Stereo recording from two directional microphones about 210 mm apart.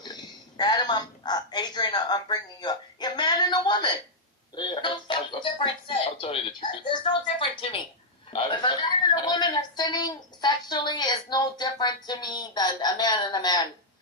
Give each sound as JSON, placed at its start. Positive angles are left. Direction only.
{"t": 0.0, "sound": "a sound", "side_deg": 20}
{"t": 4.5, "sound": "music", "side_deg": 20}
{"t": 7.3, "sound": "a woman's voice", "side_deg": 25}